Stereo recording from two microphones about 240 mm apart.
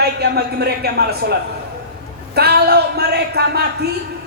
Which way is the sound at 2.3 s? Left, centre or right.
Right.